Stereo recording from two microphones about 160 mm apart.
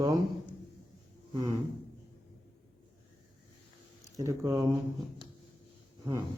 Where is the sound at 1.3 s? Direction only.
25° right (ahead or behind).